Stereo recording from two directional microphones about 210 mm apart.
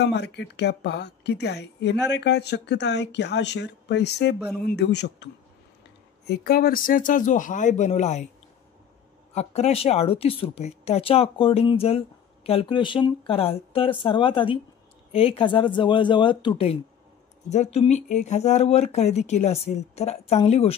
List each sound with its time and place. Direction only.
0.0 s a woman's voice: 55° left (ahead or behind); by 8.3 s 35° left (ahead or behind)
9.3 s speech: 30° left (ahead or behind)